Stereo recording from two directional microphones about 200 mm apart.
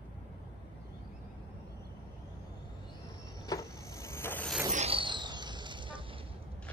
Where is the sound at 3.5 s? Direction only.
15° left (ahead or behind).